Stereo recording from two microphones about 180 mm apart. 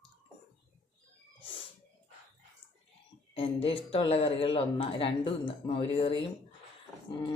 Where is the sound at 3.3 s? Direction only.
30° left (ahead or behind).